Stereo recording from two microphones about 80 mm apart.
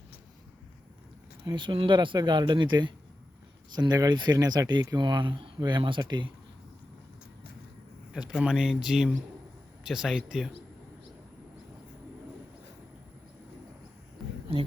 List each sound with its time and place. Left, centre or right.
1.5 s speech: right
3.8 s speech: right
4.9 s speech: right
5.5 s speech: right
8.1 s speech: centre